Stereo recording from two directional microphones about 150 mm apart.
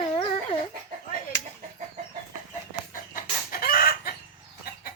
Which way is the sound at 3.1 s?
75° left (ahead or behind).